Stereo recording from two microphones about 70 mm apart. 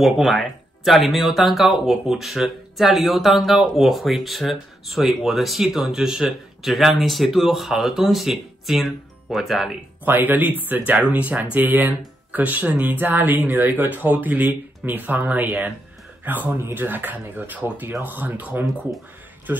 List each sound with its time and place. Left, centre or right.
0.0 s speech: centre
10.0 s speech: right